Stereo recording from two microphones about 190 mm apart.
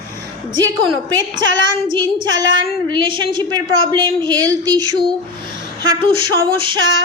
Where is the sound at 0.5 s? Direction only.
20° right (ahead or behind).